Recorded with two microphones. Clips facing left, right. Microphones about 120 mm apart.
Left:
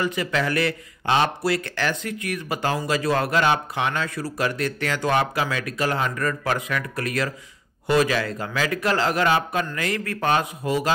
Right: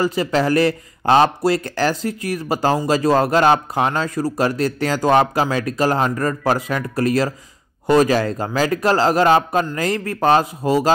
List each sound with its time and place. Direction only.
0.0 s speech: 35° right (ahead or behind)